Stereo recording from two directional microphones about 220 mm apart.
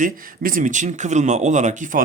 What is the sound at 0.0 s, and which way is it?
Speech, 40° right (ahead or behind).